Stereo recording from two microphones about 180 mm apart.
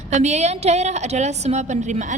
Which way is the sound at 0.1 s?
40° right (ahead or behind).